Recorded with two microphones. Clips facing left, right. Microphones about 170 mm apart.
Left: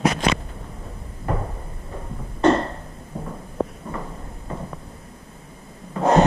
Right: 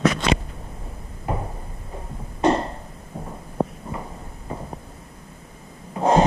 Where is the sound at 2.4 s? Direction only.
10° right (ahead or behind).